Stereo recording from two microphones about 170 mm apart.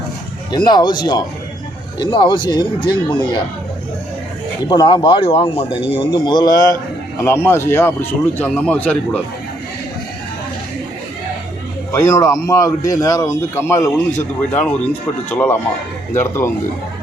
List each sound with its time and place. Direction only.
0.5 s speech: 25° left (ahead or behind)
4.7 s speech: 25° left (ahead or behind); by 9.2 s 5° left (ahead or behind)
11.9 s speech: 15° left (ahead or behind)